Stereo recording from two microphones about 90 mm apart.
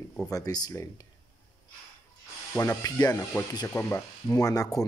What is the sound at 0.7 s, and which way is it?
Speech, 35° left (ahead or behind).